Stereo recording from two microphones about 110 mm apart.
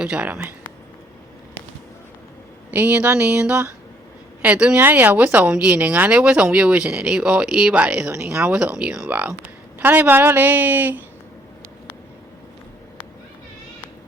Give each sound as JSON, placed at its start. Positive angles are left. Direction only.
{"t": 0.0, "sound": "speech", "side_deg": -10}
{"t": 2.6, "sound": "speech", "side_deg": -15}